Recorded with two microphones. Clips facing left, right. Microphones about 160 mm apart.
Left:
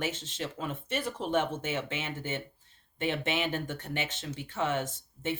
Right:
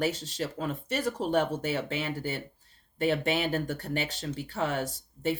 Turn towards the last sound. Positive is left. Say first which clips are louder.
# right 4 dB
turn(degrees=-35)  # may be behind; listen again after turning